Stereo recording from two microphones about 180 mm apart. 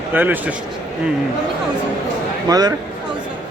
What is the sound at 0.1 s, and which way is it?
Speech, 10° right (ahead or behind).